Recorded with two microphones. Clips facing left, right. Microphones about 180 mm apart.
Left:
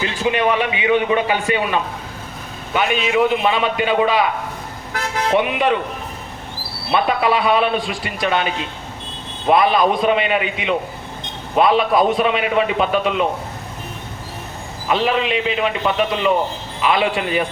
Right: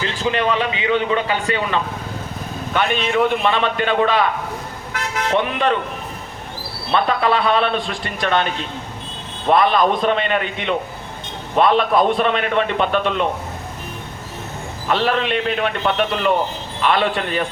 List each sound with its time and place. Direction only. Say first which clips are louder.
0.0 s a man's voice: left 2 dB; 15° left (ahead or behind)
5.3 s a man's voice: left 2 dB; 10° left (ahead or behind)
6.9 s a man's voice: left 1 dB; 10° left (ahead or behind)
14.8 s a man's voice: left 1 dB; 5° left (ahead or behind)